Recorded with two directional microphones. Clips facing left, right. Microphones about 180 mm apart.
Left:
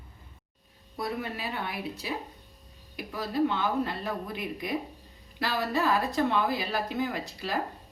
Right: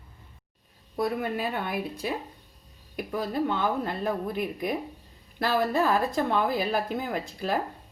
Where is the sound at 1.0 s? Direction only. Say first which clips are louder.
Right 6 dB; 50° right (ahead or behind).